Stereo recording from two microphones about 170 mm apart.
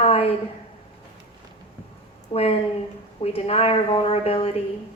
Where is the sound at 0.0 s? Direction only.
35° left (ahead or behind).